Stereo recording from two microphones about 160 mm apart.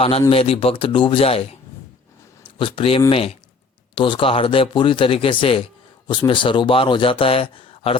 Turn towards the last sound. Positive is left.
turn(degrees=35)  # may be behind; listen again after turning